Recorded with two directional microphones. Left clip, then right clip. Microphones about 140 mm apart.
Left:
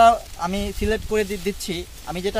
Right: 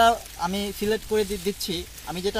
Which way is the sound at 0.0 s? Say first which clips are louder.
Left 5 dB; 10° left (ahead or behind).